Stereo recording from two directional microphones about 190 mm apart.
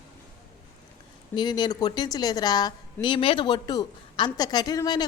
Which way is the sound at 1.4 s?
20° left (ahead or behind).